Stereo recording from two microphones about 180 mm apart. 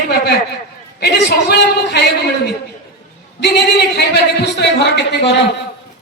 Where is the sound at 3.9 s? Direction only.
65° left (ahead or behind).